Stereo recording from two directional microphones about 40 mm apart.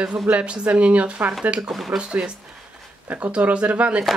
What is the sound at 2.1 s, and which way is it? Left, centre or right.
Speech, right.